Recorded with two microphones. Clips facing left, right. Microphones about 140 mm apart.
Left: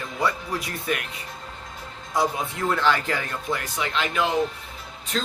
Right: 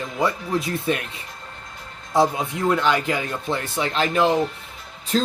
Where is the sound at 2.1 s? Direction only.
25° right (ahead or behind).